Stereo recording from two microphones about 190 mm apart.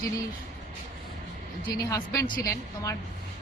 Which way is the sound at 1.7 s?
15° left (ahead or behind).